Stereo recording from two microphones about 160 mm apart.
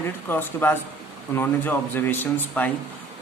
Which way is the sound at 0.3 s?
15° left (ahead or behind).